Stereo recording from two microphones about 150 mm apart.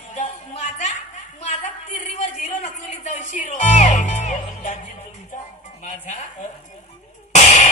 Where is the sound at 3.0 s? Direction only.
50° left (ahead or behind).